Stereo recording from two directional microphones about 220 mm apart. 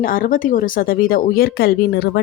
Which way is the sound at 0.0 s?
40° left (ahead or behind).